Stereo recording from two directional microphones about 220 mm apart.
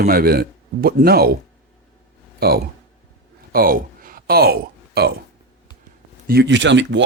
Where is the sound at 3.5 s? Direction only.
40° right (ahead or behind).